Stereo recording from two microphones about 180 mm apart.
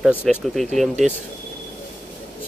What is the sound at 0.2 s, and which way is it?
Speech, 5° right (ahead or behind).